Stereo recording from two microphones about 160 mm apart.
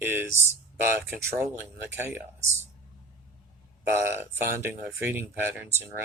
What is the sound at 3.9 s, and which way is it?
Speech, 15° right (ahead or behind).